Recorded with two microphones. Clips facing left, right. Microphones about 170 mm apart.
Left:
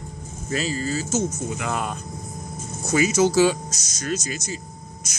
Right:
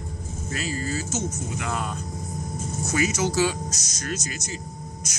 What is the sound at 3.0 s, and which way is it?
Speech, 30° left (ahead or behind).